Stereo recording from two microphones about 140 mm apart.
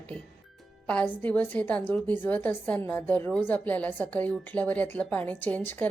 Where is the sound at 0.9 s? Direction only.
10° left (ahead or behind).